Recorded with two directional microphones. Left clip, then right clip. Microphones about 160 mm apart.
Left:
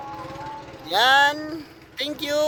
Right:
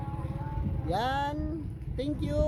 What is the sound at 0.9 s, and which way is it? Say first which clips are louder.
Speech: left 13 dB; centre (ahead or behind).